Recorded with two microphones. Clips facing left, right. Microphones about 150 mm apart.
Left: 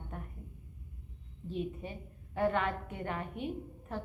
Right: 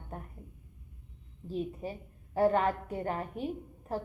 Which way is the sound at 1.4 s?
35° right (ahead or behind).